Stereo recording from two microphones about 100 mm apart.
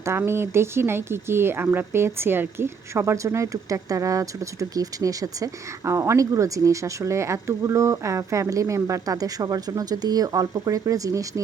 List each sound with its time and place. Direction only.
0.0 s speech: 25° right (ahead or behind)